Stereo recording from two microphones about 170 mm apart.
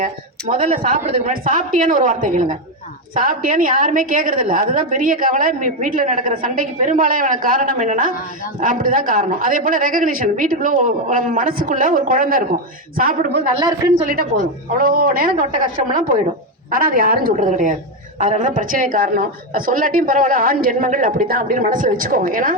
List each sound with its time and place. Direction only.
0.0 s a woman's voice: 50° right (ahead or behind)
13.5 s speech: 25° right (ahead or behind)
14.0 s speech: 55° right (ahead or behind)